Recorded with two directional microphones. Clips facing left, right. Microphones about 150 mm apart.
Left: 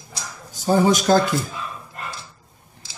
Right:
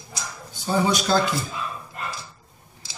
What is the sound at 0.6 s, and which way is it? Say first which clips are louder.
Speech: left 5 dB; 45° left (ahead or behind).